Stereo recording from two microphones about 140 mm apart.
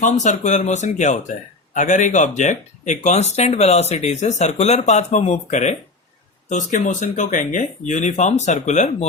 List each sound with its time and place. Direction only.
0.0 s speech: 60° left (ahead or behind)